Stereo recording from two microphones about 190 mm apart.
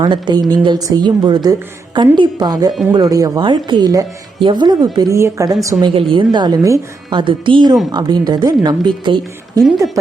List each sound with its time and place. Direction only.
0.0 s a woman's voice: 20° right (ahead or behind)
5.8 s a woman's voice: 30° right (ahead or behind)
9.6 s speech: centre (ahead or behind)